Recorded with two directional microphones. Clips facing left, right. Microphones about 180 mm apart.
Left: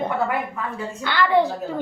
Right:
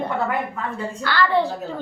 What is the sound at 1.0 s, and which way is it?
Speech, 20° left (ahead or behind).